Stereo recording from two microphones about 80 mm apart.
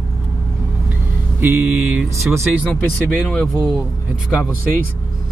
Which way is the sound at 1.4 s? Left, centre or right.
Centre.